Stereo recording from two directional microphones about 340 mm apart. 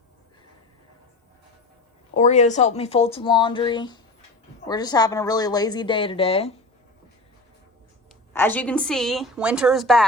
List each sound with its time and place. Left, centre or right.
2.1 s a woman's voice: left
8.3 s a woman's voice: centre